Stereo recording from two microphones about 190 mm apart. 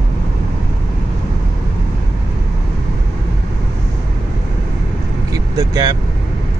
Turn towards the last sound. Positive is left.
turn(degrees=-20)  # may be behind; listen again after turning